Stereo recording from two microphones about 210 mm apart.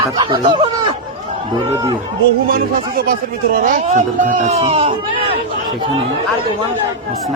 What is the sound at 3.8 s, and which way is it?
Speech, 35° right (ahead or behind).